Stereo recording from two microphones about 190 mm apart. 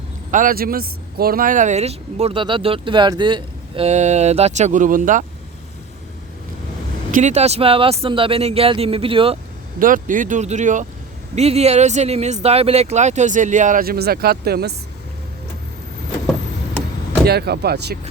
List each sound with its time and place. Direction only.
0.3 s speech: 45° right (ahead or behind)
7.1 s speech: 40° right (ahead or behind)
9.7 s speech: 45° right (ahead or behind)
17.2 s speech: 55° right (ahead or behind)